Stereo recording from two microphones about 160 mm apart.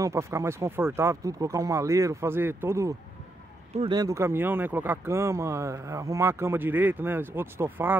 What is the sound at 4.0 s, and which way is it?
Speech, 20° right (ahead or behind).